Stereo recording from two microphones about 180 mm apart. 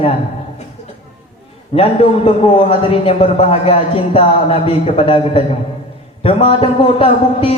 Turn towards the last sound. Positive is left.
turn(degrees=30)  # may be behind; listen again after turning